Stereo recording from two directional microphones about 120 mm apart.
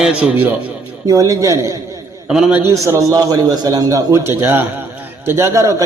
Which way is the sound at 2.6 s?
20° right (ahead or behind).